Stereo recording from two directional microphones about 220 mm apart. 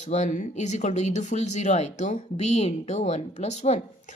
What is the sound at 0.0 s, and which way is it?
A woman's voice, 30° left (ahead or behind).